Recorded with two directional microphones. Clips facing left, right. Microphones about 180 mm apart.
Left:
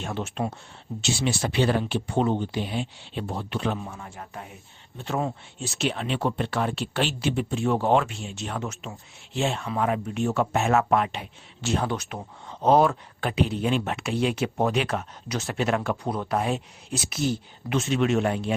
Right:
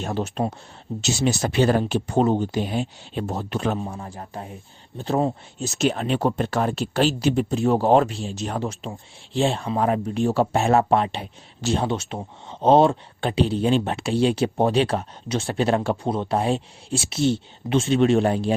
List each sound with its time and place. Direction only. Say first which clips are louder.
0.0 s speech: right 4 dB; 35° right (ahead or behind)